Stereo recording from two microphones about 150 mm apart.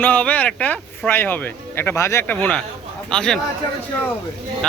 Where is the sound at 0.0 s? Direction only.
10° left (ahead or behind).